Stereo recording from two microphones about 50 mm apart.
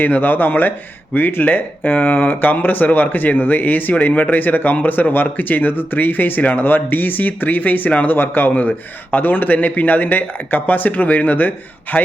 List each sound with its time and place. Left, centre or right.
0.0 s speech: left